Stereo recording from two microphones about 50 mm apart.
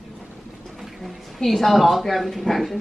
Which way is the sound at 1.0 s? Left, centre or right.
Centre.